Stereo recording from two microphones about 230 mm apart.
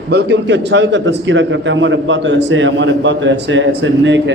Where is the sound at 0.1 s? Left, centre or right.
Right.